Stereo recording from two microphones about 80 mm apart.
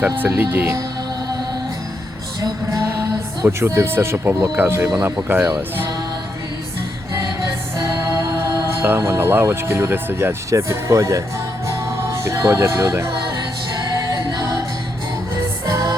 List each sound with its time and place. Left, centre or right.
0.3 s speech: right
3.4 s speech: right
7.8 s music: right
9.0 s speech: right
11.7 s music: right
14.1 s music: right